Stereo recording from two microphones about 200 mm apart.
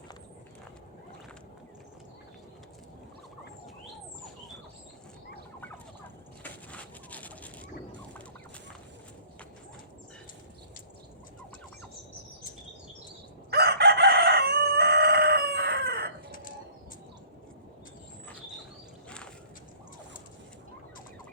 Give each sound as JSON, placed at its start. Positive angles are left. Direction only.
{"t": 6.4, "sound": "fowl", "side_deg": 5}
{"t": 13.5, "sound": "chicken", "side_deg": -55}